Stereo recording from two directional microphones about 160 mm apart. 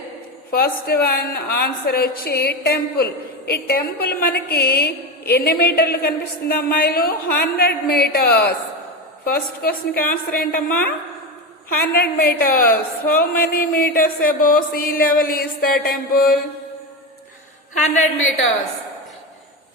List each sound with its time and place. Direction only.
0.5 s a woman's voice: 75° left (ahead or behind)
9.3 s speech: 65° left (ahead or behind)
17.7 s a woman's voice: 50° left (ahead or behind)